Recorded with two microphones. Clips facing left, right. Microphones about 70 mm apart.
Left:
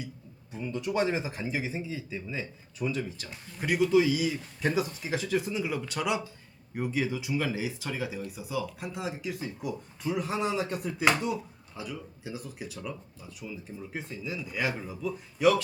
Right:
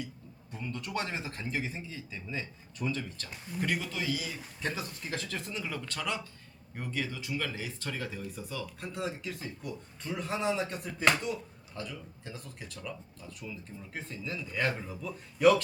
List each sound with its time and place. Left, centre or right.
0.5 s speech: centre